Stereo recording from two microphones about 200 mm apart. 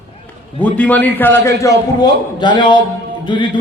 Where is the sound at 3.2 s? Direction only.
25° left (ahead or behind).